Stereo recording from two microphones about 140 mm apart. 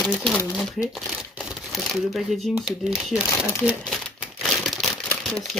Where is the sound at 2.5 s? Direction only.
5° right (ahead or behind).